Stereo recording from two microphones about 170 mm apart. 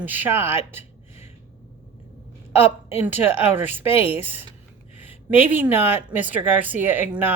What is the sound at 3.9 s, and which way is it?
Speech, 35° left (ahead or behind).